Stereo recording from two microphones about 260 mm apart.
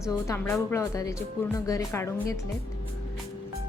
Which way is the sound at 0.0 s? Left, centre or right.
Centre.